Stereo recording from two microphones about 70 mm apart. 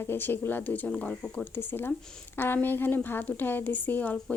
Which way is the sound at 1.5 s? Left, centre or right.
Left.